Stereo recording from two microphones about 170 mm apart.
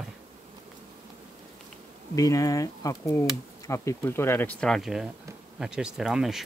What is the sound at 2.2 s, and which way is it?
Speech, 20° left (ahead or behind).